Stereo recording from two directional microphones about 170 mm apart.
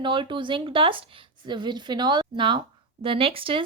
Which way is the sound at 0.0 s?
30° right (ahead or behind).